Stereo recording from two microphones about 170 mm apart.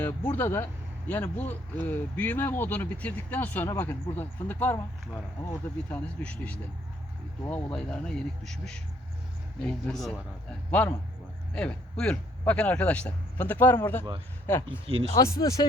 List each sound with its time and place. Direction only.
0.0 s speech: 10° left (ahead or behind)
9.6 s speech: 5° left (ahead or behind); by 15.6 s 20° left (ahead or behind)